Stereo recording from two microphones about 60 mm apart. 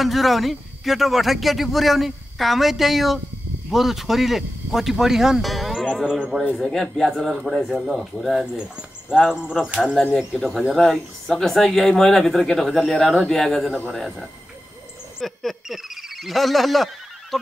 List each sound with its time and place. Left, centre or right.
0.0 s a man's voice: centre
9.1 s a sound: centre
9.7 s speech: centre
10.1 s a man's voice: centre